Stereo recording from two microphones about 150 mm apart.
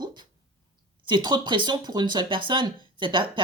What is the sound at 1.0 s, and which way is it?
Speech, 30° right (ahead or behind).